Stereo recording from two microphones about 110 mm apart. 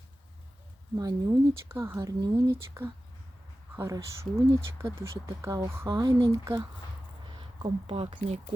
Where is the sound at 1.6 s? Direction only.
25° right (ahead or behind).